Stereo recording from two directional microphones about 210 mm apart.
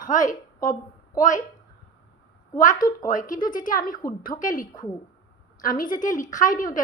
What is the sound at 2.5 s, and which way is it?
A woman's voice, 35° left (ahead or behind).